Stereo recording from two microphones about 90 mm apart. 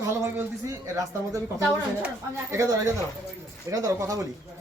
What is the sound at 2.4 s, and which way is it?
Speech, 35° right (ahead or behind).